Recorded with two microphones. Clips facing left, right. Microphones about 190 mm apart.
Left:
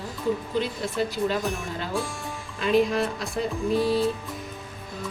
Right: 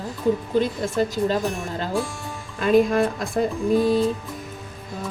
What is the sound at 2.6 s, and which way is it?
Speech, 50° right (ahead or behind).